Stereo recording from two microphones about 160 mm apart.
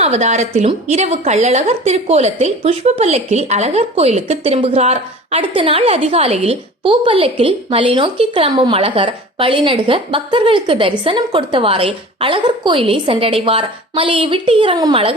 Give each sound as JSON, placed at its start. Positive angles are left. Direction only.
{"t": 0.0, "sound": "a woman's voice", "side_deg": -45}